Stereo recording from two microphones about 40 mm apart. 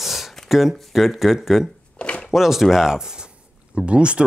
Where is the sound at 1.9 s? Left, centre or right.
Left.